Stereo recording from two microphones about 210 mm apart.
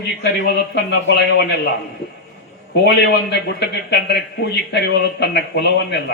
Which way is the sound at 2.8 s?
50° left (ahead or behind).